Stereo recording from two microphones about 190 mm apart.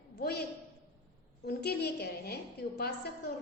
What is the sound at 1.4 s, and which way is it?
Speech, 55° left (ahead or behind).